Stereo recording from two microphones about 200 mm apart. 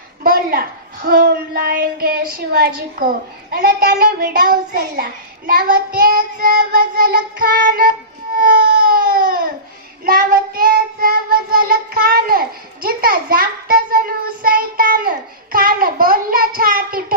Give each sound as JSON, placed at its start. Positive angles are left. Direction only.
{"t": 0.2, "sound": "a woman's voice", "side_deg": -45}
{"t": 8.4, "sound": "baby cry", "side_deg": -45}
{"t": 10.1, "sound": "child singing", "side_deg": -45}
{"t": 15.5, "sound": "a woman's voice", "side_deg": -45}